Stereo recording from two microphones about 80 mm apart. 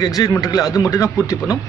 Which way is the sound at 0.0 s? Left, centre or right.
Left.